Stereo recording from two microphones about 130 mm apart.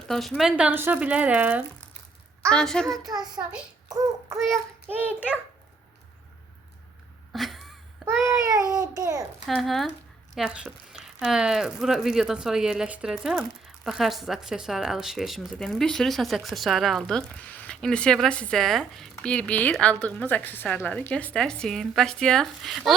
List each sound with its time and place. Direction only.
0.1 s speech: centre (ahead or behind)
2.5 s speech: 5° left (ahead or behind)
3.1 s a child's voice: 30° right (ahead or behind)
3.8 s child singing: 30° right (ahead or behind)
4.5 s speech: 15° right (ahead or behind)
7.3 s a sound: centre (ahead or behind)
8.2 s a sound: 25° right (ahead or behind)
9.0 s a child's voice: 25° right (ahead or behind)
9.6 s speech: centre (ahead or behind)